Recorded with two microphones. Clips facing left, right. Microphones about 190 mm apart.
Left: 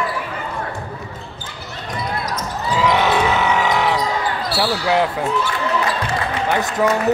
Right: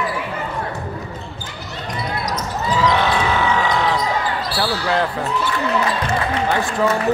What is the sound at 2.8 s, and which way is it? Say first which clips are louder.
Basketball bounce: left 2 dB; 15° left (ahead or behind).